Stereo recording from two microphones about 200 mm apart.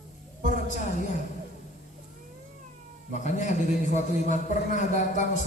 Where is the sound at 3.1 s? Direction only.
35° left (ahead or behind).